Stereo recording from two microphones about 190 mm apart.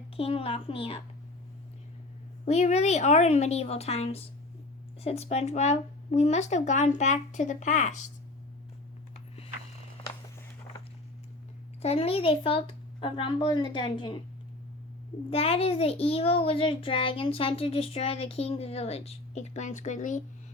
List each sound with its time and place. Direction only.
0.2 s speech: 30° left (ahead or behind)
2.4 s a child's voice: 35° left (ahead or behind)
11.8 s speech: 30° left (ahead or behind)
15.3 s a child's voice: 30° left (ahead or behind)